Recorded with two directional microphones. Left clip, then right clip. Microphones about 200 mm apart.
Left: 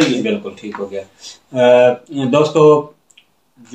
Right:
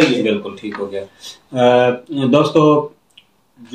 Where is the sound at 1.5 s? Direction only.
20° left (ahead or behind).